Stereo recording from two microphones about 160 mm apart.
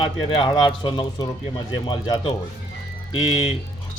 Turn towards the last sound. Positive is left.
turn(degrees=30)  # may be behind; listen again after turning